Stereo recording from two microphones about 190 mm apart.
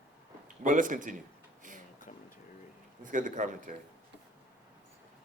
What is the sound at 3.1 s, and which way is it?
Speech, 45° right (ahead or behind).